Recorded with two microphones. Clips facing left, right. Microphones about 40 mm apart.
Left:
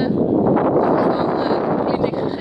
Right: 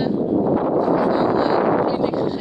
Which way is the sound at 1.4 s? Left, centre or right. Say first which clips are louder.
Right 1 dB; centre.